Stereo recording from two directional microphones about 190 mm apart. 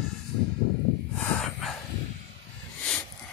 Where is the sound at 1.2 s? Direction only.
5° left (ahead or behind).